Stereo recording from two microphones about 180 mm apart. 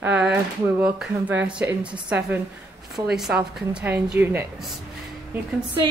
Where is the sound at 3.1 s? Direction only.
5° right (ahead or behind).